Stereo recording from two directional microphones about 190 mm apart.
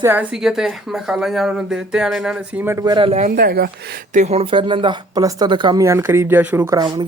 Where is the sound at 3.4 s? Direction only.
50° right (ahead or behind).